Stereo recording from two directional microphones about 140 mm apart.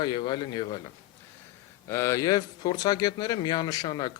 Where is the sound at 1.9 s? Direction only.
20° left (ahead or behind).